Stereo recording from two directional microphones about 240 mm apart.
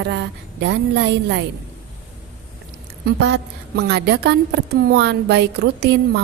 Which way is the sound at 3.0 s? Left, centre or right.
Right.